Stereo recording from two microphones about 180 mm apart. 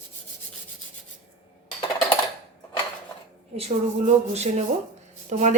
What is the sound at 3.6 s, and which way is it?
A woman's voice, 40° right (ahead or behind).